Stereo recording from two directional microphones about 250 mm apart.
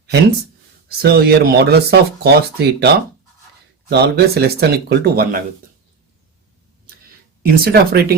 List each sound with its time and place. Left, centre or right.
0.9 s speech: right
7.4 s speech: right